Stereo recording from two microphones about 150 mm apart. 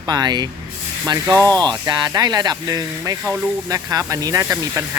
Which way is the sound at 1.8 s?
30° right (ahead or behind).